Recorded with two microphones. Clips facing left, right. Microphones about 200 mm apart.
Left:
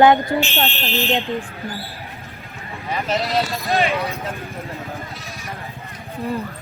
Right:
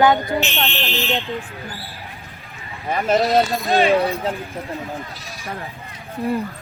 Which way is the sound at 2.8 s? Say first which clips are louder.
Right 5 dB; 50° right (ahead or behind).